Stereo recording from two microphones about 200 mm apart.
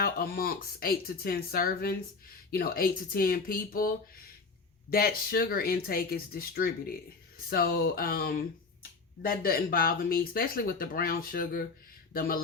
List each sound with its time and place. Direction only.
0.0 s speech: 45° left (ahead or behind)